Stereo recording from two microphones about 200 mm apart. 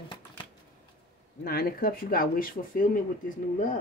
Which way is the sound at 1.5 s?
50° left (ahead or behind).